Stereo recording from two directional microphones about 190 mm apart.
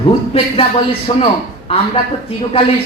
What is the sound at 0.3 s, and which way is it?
A man's voice, 30° left (ahead or behind).